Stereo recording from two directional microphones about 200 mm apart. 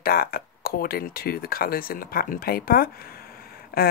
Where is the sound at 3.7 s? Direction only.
50° left (ahead or behind).